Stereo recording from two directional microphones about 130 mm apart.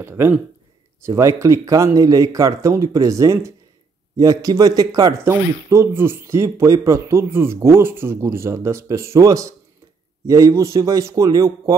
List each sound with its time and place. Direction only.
0.0 s speech: 15° right (ahead or behind)